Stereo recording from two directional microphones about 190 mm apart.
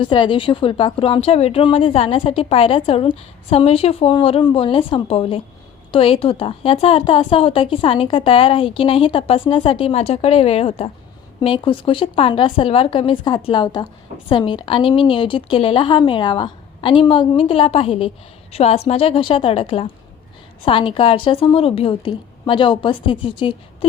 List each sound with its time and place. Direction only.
0.0 s a woman's voice: 25° left (ahead or behind)